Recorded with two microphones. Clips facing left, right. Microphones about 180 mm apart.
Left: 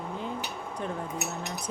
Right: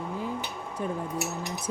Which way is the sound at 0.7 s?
10° right (ahead or behind).